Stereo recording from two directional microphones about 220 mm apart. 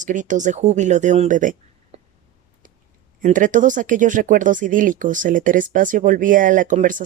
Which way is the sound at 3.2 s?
35° right (ahead or behind).